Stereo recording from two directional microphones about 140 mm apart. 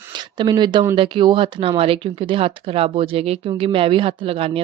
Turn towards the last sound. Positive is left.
turn(degrees=-40)  # may be behind; listen again after turning